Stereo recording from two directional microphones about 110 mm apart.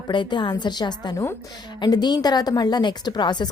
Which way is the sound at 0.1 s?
45° left (ahead or behind).